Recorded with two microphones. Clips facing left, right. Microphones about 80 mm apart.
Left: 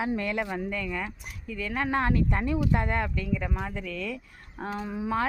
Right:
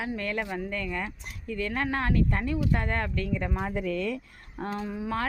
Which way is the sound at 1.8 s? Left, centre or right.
Centre.